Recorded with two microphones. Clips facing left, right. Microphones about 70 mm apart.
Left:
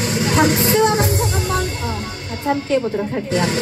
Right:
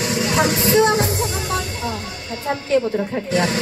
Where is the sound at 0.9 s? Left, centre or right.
Left.